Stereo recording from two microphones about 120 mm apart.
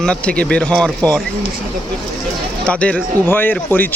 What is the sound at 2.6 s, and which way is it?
Speech, 10° left (ahead or behind).